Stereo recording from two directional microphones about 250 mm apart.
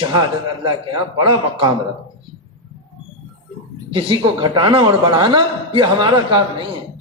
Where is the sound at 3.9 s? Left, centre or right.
Centre.